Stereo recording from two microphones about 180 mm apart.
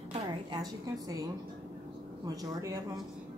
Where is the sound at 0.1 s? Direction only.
25° right (ahead or behind).